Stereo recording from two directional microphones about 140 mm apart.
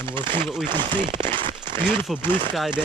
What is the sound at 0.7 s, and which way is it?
Speech, 35° right (ahead or behind).